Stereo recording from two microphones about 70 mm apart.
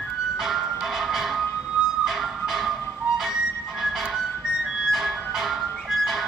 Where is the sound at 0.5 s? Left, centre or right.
Centre.